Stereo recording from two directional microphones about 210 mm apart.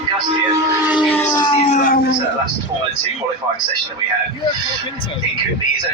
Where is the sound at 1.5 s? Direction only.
30° left (ahead or behind).